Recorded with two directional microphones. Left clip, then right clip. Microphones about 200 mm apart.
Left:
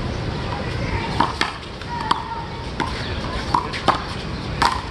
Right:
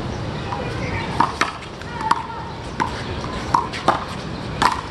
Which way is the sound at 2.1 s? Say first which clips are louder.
Right 2 dB; 5° right (ahead or behind).